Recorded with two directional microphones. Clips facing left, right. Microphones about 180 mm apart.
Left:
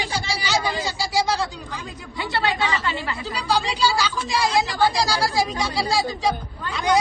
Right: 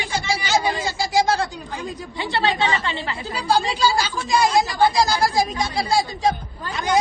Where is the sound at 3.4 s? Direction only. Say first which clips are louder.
Right 2 dB; 50° right (ahead or behind).